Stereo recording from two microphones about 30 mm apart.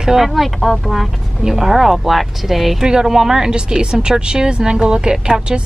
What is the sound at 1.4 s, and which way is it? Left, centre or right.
Speech, centre.